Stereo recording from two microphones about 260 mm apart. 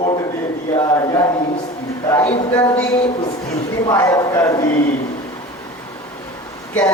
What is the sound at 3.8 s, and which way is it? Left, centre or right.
Speech, centre.